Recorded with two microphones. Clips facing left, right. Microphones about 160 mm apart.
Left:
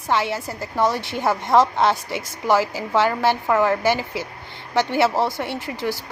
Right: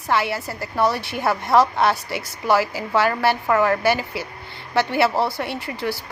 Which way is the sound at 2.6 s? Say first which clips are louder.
Even; 15° right (ahead or behind).